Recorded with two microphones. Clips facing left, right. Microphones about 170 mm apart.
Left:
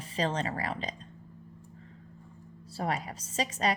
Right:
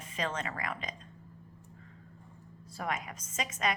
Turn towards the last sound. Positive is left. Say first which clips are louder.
# left 4 dB
turn(degrees=30)  # may be behind; listen again after turning